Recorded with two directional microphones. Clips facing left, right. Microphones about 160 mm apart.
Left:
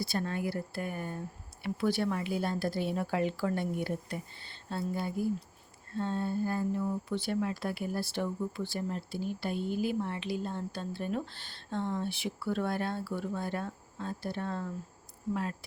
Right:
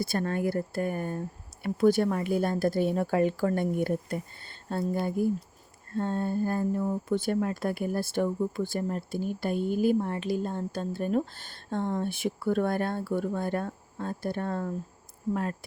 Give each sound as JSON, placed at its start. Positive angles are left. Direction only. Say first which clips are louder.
{"t": 0.0, "sound": "speech", "louder": "right 5 dB", "side_deg": -50}